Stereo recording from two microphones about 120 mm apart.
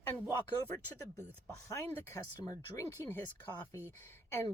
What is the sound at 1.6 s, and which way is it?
Speech, 25° left (ahead or behind).